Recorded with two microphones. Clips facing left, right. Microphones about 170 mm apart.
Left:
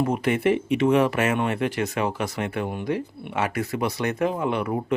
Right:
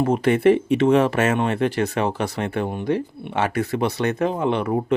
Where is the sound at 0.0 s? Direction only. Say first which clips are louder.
Right 5 dB; 30° right (ahead or behind).